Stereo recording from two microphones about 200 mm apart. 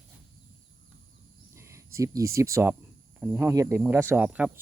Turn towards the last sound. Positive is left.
turn(degrees=-10)  # may be behind; listen again after turning